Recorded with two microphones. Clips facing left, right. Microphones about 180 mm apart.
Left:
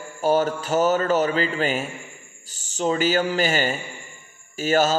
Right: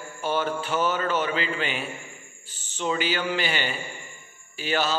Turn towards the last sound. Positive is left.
turn(degrees=45)  # may be behind; listen again after turning